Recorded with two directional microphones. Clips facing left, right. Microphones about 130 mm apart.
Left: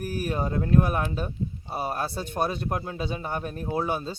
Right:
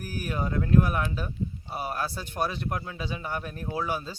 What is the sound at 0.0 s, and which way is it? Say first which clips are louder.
A man's voice: left 3 dB; 30° left (ahead or behind).